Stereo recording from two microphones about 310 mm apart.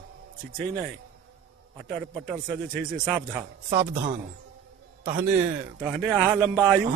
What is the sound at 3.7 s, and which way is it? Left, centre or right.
Speech, centre.